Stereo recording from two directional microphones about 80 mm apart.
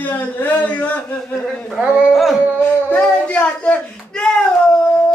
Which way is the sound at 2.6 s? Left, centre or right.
Centre.